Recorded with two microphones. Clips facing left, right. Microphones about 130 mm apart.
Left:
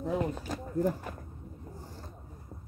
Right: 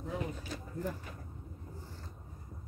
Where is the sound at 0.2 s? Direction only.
45° left (ahead or behind).